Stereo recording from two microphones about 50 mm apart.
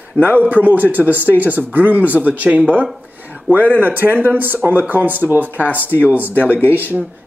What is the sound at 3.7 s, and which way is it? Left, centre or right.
Speech, right.